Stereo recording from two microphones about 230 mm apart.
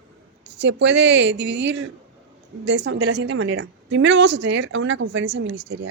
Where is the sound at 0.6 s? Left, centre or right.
Right.